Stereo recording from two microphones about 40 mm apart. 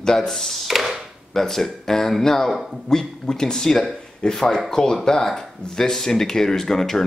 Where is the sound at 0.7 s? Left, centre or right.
Centre.